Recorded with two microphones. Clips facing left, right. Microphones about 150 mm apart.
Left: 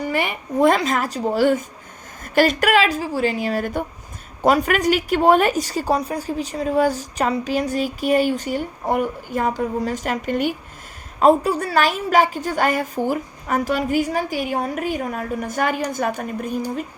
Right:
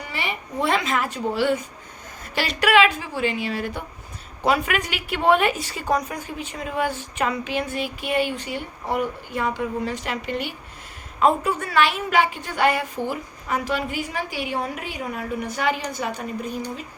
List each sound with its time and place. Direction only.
0.0 s a woman's voice: 50° left (ahead or behind)